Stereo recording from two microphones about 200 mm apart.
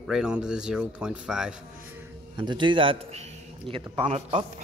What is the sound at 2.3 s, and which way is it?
A man's voice, 20° right (ahead or behind).